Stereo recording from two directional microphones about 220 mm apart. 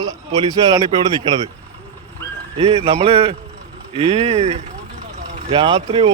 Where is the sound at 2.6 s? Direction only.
30° right (ahead or behind).